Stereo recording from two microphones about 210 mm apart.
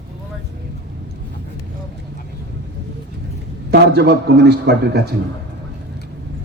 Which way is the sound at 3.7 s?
50° right (ahead or behind).